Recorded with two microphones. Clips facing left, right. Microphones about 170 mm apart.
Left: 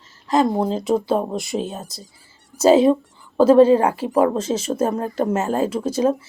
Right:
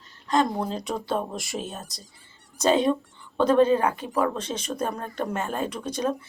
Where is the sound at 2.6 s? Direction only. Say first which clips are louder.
Left 8 dB; 35° left (ahead or behind).